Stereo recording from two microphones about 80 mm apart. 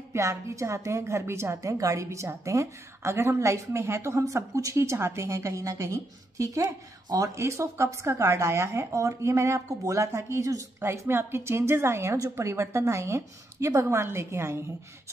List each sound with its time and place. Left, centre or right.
0.1 s a woman's voice: right
7.3 s a woman's voice: right
10.8 s a woman's voice: right